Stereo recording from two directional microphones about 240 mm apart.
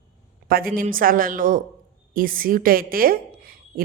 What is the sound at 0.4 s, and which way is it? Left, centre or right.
A woman's voice, right.